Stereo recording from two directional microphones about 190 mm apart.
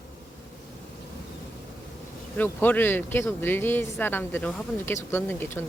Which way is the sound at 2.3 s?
10° left (ahead or behind).